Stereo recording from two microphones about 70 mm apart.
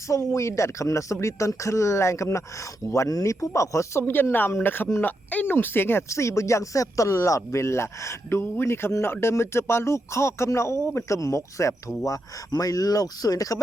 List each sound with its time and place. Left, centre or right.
0.1 s speech: left
3.1 s speech: left
4.0 s speech: left
6.1 s speech: left